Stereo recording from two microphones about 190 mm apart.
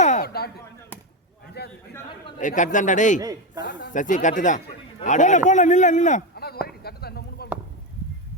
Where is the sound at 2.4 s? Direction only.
40° left (ahead or behind).